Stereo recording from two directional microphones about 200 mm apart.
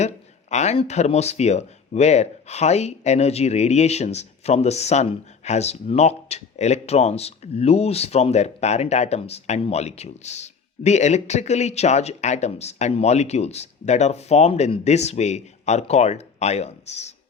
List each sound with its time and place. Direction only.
0.5 s speech: 35° left (ahead or behind)